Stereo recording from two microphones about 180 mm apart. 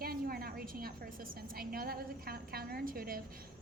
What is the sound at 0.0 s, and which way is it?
A woman's voice, 55° right (ahead or behind).